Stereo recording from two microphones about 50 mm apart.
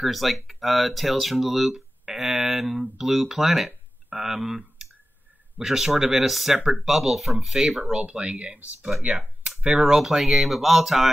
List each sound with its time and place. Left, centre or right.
0.0 s speech: centre
7.9 s speech: right
9.8 s speech: centre